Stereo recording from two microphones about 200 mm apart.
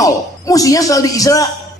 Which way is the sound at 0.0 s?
15° left (ahead or behind).